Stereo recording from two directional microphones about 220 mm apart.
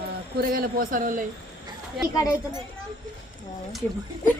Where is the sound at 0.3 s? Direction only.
40° right (ahead or behind).